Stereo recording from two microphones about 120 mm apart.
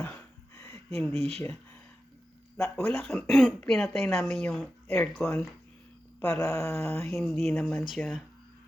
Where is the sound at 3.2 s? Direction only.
Centre (ahead or behind).